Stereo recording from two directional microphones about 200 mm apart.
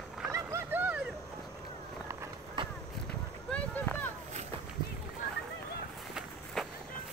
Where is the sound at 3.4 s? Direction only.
5° left (ahead or behind).